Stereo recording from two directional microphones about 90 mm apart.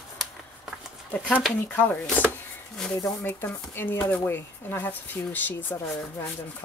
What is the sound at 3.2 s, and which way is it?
Speech, 25° left (ahead or behind).